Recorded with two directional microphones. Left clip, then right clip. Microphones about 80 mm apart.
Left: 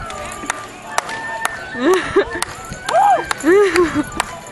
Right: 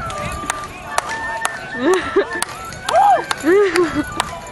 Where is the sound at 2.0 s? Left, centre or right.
Left.